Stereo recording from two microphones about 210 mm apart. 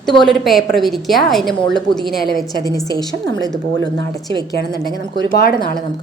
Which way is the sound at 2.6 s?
15° left (ahead or behind).